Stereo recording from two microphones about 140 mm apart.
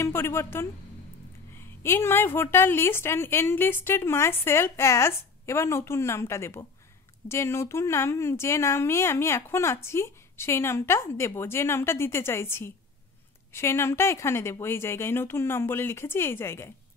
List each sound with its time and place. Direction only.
0.0 s a woman's voice: 15° left (ahead or behind)